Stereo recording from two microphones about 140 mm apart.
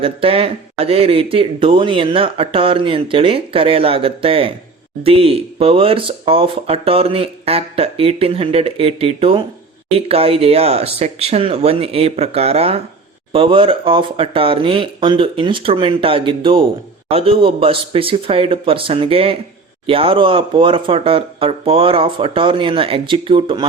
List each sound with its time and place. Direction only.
0.0 s speech: 40° right (ahead or behind)